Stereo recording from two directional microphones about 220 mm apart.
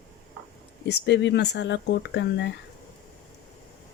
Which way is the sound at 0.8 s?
50° left (ahead or behind).